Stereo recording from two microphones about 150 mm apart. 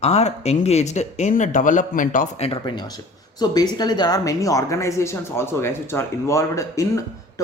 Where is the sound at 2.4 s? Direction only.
35° left (ahead or behind).